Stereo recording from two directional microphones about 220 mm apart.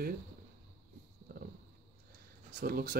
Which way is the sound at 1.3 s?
45° right (ahead or behind).